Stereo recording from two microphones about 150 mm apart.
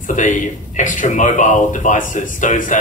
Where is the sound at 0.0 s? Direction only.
55° left (ahead or behind).